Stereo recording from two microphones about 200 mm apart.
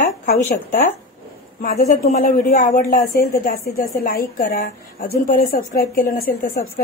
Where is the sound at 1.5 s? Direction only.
40° left (ahead or behind).